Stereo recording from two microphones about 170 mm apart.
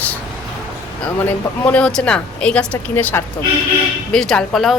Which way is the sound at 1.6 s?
5° left (ahead or behind).